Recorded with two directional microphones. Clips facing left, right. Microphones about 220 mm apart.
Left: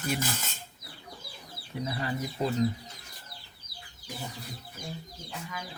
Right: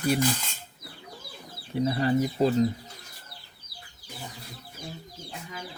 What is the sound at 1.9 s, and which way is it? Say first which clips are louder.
Cutlery: right 9 dB; 35° right (ahead or behind).